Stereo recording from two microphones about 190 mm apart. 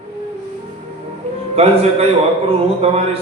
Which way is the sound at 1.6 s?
30° right (ahead or behind).